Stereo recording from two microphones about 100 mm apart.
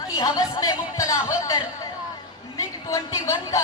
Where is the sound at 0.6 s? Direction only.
35° left (ahead or behind).